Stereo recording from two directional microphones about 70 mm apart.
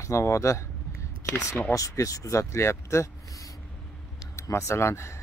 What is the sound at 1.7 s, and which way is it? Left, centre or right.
Speech, left.